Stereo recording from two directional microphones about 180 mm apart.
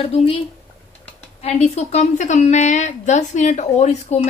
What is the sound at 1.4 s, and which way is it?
A woman's voice, 35° left (ahead or behind).